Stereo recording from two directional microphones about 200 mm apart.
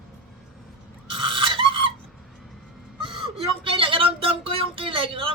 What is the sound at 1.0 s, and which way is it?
Filing, 25° right (ahead or behind).